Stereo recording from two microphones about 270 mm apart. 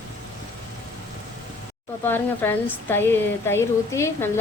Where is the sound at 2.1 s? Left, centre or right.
Centre.